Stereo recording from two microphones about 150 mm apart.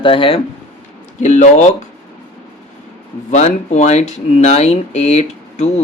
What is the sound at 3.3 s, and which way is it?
Speech, 50° left (ahead or behind).